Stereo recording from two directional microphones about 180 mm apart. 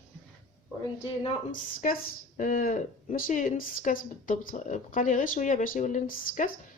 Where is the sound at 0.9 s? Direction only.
40° left (ahead or behind).